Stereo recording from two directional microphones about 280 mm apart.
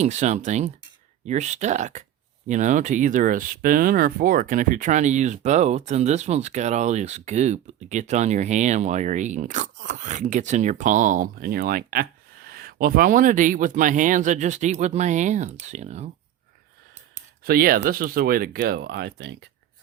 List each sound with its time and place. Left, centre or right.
0.0 s speech: right
17.2 s speech: right